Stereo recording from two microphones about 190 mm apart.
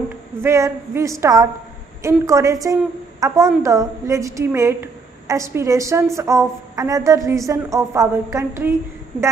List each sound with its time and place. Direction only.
0.4 s a woman's voice: 15° right (ahead or behind)